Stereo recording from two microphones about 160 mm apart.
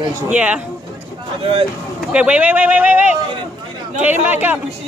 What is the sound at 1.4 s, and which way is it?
Speech, 35° right (ahead or behind).